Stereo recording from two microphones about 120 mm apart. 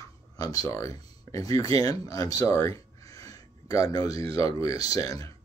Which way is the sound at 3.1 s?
30° left (ahead or behind).